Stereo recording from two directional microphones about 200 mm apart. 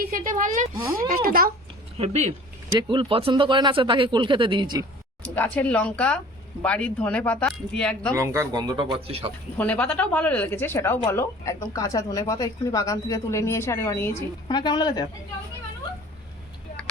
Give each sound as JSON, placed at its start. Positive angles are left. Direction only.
{"t": 0.1, "sound": "speech", "side_deg": -45}
{"t": 2.0, "sound": "speech", "side_deg": -35}
{"t": 5.2, "sound": "speech", "side_deg": 10}
{"t": 8.1, "sound": "speech", "side_deg": -15}
{"t": 9.6, "sound": "speech", "side_deg": 5}